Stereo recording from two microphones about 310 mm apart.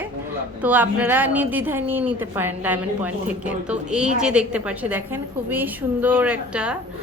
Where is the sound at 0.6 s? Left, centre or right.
Centre.